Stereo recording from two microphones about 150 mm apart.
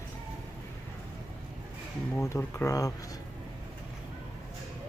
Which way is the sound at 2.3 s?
20° left (ahead or behind).